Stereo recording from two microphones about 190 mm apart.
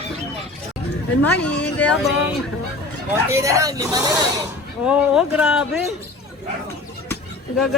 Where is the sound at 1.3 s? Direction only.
5° left (ahead or behind).